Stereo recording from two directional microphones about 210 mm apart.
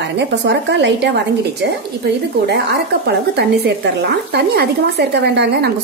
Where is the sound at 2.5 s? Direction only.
50° right (ahead or behind).